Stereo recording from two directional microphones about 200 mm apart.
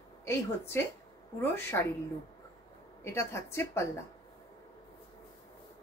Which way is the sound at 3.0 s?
15° left (ahead or behind).